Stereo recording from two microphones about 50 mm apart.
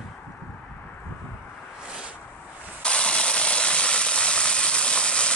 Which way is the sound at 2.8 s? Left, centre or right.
Left.